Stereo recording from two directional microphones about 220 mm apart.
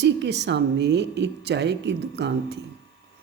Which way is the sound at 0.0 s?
50° right (ahead or behind).